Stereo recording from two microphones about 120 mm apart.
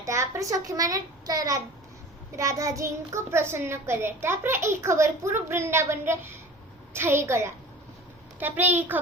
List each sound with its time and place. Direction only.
0.0 s a child's voice: 25° right (ahead or behind)